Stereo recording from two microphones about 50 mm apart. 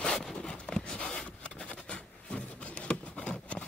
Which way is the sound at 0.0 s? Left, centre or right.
Centre.